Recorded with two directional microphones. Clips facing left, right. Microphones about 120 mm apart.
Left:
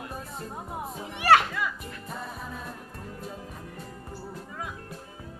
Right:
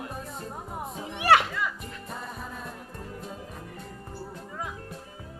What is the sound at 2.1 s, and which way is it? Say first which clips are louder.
Music: left 1 dB; centre (ahead or behind).